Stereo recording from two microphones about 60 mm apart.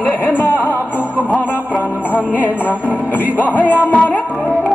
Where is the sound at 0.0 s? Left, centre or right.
Left.